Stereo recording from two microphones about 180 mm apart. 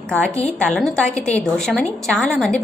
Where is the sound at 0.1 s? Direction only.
5° left (ahead or behind).